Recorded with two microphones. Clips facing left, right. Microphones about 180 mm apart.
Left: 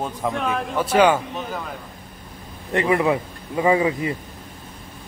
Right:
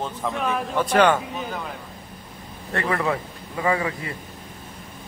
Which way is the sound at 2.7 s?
20° left (ahead or behind).